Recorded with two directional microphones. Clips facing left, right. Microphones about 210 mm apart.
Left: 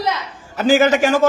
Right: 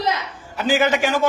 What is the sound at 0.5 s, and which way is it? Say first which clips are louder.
Speech: left 5 dB; 45° left (ahead or behind).